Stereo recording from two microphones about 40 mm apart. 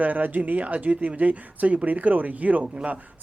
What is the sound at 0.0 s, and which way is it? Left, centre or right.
Speech, right.